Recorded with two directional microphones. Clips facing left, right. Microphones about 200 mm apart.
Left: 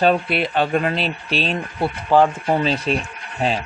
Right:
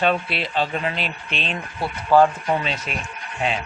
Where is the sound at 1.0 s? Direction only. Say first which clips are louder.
Left 6 dB; 35° left (ahead or behind).